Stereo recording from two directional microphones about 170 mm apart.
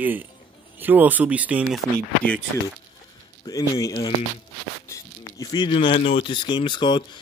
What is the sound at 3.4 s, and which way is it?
Speech, 20° left (ahead or behind).